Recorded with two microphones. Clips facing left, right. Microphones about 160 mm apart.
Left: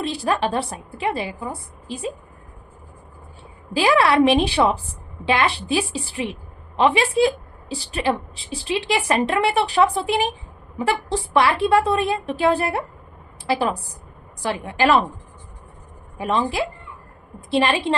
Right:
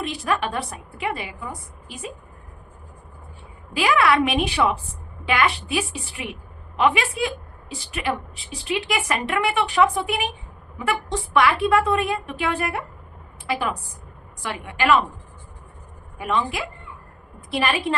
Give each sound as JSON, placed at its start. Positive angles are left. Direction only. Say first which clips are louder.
{"t": 0.0, "sound": "a woman's voice", "louder": "left 3 dB", "side_deg": 30}
{"t": 3.8, "sound": "a woman's voice", "louder": "left 3 dB", "side_deg": 35}
{"t": 16.1, "sound": "a woman's voice", "louder": "left 3 dB", "side_deg": 35}